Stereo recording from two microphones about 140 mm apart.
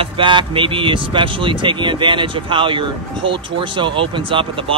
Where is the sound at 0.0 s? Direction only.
35° right (ahead or behind).